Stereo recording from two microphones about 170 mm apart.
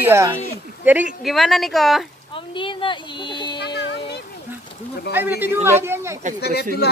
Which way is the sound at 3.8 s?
90° left.